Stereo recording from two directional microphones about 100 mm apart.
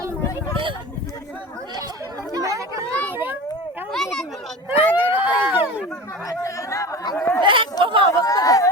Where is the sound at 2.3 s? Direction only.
35° right (ahead or behind).